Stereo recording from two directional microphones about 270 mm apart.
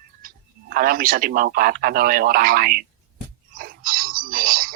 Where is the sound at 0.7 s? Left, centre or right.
Right.